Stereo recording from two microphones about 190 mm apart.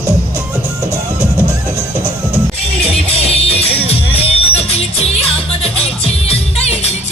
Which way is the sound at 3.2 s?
30° left (ahead or behind).